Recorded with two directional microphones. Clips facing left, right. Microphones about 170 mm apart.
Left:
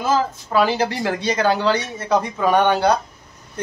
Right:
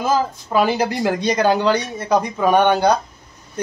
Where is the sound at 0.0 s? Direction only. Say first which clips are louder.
Right 1 dB; 15° right (ahead or behind).